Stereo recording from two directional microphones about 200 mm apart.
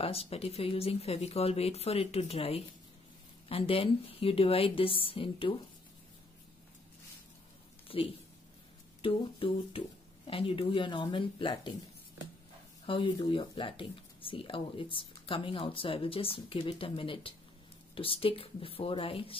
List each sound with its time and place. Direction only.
0.0 s speech: 30° left (ahead or behind)
7.9 s speech: 25° left (ahead or behind)